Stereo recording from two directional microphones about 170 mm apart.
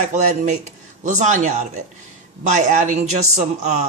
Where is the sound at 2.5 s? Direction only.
45° right (ahead or behind).